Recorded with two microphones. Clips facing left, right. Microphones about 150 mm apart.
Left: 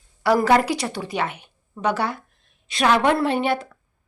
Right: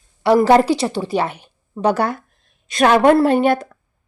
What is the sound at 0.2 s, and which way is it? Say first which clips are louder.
A woman's voice: right 5 dB; 25° right (ahead or behind).